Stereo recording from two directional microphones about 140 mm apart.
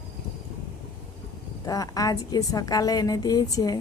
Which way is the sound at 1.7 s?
25° left (ahead or behind).